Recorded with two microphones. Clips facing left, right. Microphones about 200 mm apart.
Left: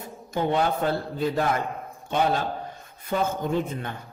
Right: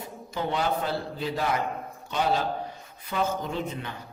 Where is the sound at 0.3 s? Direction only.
50° left (ahead or behind).